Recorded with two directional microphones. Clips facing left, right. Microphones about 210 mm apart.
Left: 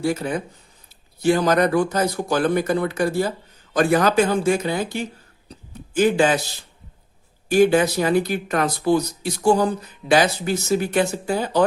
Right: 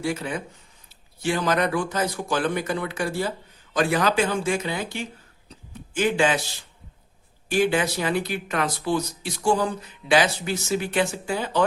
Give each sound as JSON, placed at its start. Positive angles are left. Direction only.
{"t": 0.0, "sound": "speech", "side_deg": 40}
{"t": 5.5, "sound": "a sound", "side_deg": 40}
{"t": 7.4, "sound": "speech", "side_deg": 40}